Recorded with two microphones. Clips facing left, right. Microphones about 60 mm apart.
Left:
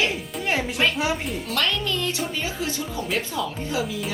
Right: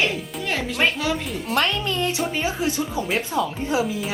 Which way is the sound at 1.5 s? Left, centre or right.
Right.